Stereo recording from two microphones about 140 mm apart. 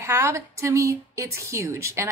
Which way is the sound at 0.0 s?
20° right (ahead or behind).